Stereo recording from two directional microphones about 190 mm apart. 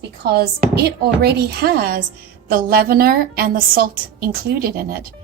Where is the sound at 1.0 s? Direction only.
60° right (ahead or behind).